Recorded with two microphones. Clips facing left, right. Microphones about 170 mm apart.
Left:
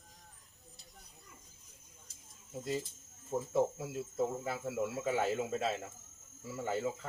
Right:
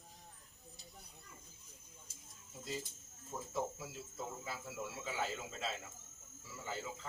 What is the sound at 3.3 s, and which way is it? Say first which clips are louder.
Speech: left 9 dB; 50° left (ahead or behind).